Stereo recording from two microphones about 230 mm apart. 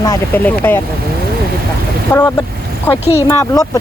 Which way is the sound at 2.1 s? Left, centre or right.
Centre.